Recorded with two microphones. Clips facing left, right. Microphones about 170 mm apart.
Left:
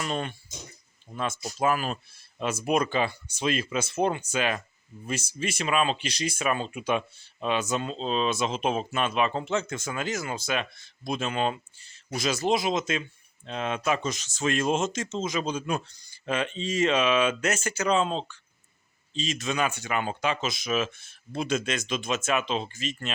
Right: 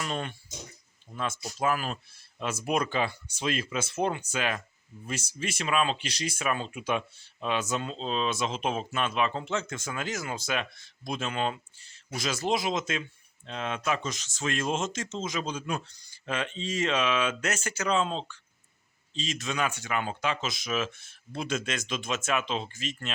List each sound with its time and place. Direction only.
0.0 s speech: 5° left (ahead or behind)
1.1 s speech: 20° left (ahead or behind)
1.5 s speech: 10° left (ahead or behind)
13.0 s speech: 15° left (ahead or behind)